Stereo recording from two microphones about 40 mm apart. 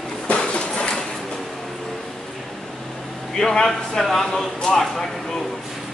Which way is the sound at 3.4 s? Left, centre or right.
Centre.